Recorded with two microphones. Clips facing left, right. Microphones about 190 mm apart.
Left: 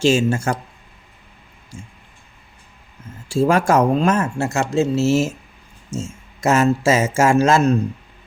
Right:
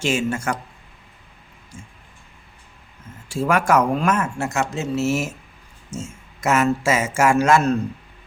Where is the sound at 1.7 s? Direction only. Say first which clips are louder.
Left 4 dB; 10° left (ahead or behind).